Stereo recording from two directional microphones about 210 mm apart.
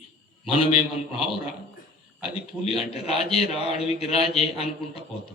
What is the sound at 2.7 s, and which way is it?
A man's voice, 30° left (ahead or behind).